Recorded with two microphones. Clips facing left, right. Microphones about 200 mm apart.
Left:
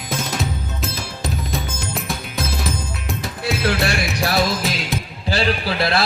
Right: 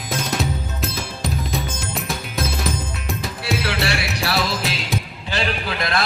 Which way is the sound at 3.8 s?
45° left (ahead or behind).